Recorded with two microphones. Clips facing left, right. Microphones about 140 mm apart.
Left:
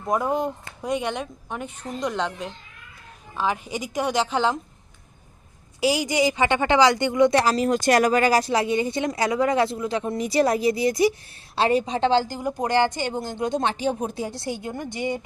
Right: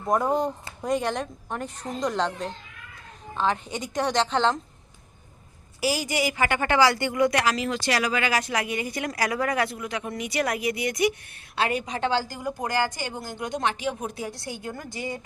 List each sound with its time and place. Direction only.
0.0 s speech: centre (ahead or behind)
5.8 s a woman's voice: 15° left (ahead or behind)